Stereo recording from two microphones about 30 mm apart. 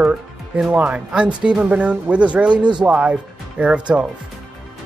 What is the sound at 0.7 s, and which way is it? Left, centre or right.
Music, right.